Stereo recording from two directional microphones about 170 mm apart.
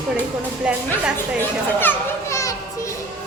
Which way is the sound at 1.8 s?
15° left (ahead or behind).